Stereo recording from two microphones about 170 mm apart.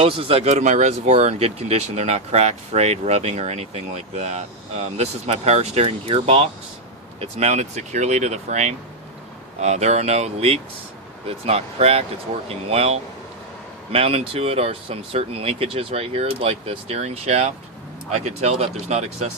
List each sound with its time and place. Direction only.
0.0 s speech: 35° right (ahead or behind)